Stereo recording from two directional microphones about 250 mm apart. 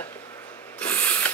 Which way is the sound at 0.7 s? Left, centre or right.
Centre.